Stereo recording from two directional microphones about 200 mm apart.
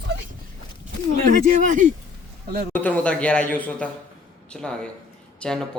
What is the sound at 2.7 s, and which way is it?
A man's voice, 5° left (ahead or behind).